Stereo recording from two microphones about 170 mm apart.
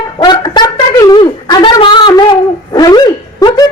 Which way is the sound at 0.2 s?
25° left (ahead or behind).